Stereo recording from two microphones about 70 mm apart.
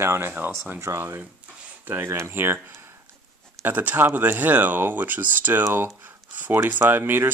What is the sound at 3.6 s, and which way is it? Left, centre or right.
Speech, right.